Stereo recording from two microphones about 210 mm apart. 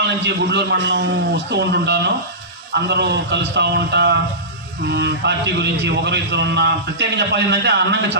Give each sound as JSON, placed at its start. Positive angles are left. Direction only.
{"t": 0.0, "sound": "a man's voice", "side_deg": -55}